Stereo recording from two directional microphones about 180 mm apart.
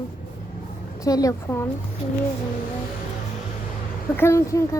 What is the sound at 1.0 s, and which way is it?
Speech, 20° left (ahead or behind).